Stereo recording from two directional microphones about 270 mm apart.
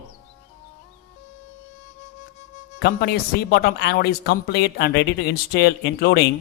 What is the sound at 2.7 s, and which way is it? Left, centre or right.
Speech, left.